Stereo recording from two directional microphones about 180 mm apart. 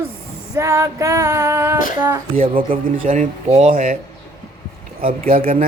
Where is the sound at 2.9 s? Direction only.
45° right (ahead or behind).